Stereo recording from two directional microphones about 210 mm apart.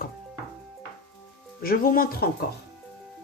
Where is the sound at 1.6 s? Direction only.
45° left (ahead or behind).